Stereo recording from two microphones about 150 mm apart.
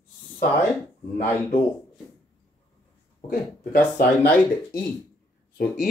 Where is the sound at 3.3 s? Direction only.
75° left (ahead or behind).